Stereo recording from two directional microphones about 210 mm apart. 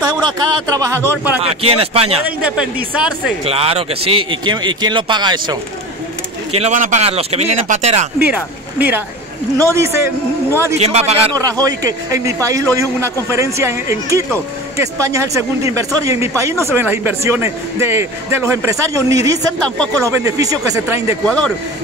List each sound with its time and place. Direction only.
0.0 s speech: 20° right (ahead or behind)
1.4 s speech: 30° right (ahead or behind)
2.2 s speech: 5° right (ahead or behind)
3.4 s speech: 30° right (ahead or behind)
6.5 s speech: 35° right (ahead or behind)
8.7 s speech: 10° right (ahead or behind)
10.8 s speech: 30° right (ahead or behind)
11.6 s speech: 15° right (ahead or behind)